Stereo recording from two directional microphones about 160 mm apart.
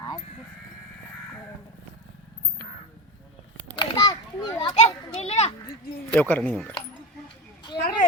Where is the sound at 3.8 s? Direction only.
30° left (ahead or behind).